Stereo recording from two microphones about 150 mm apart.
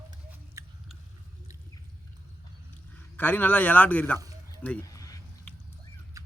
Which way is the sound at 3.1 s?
10° left (ahead or behind).